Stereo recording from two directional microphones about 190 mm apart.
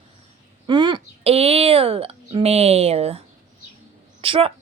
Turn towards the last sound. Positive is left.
turn(degrees=-30)  # may be behind; listen again after turning